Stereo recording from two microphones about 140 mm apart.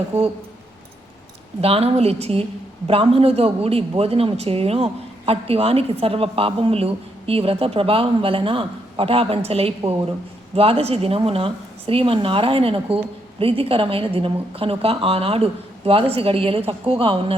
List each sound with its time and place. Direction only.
1.6 s a woman's voice: 45° right (ahead or behind)